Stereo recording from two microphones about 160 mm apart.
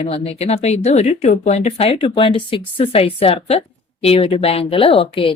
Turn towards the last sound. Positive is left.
turn(degrees=35)  # may be behind; listen again after turning